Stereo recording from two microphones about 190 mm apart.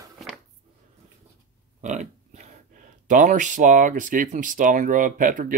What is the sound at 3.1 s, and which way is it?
Speech, 40° right (ahead or behind).